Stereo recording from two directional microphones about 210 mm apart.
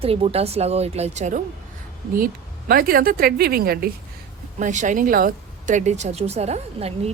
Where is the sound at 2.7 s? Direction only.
45° right (ahead or behind).